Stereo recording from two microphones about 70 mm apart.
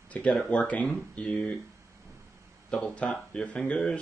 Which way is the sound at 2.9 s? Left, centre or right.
Centre.